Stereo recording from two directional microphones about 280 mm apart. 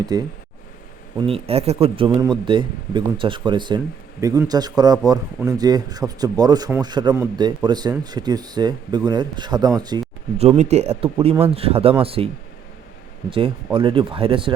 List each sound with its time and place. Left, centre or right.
0.0 s speech: centre
1.3 s speech: right
13.7 s speech: centre